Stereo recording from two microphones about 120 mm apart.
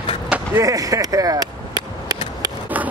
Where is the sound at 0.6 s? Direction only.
30° right (ahead or behind).